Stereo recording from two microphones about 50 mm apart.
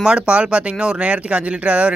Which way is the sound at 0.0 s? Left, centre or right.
Centre.